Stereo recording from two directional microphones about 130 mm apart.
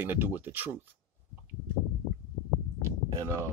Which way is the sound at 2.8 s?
20° right (ahead or behind).